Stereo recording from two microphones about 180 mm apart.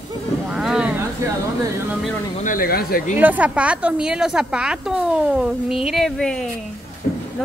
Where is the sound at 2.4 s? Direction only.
50° left (ahead or behind).